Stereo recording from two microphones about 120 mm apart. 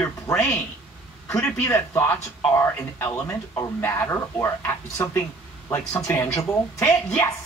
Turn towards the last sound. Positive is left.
turn(degrees=20)  # may be behind; listen again after turning